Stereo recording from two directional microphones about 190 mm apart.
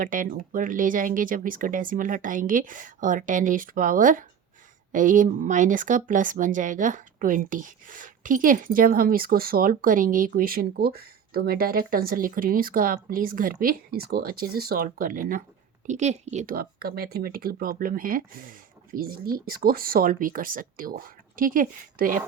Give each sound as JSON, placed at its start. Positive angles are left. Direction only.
{"t": 0.0, "sound": "speech", "side_deg": -45}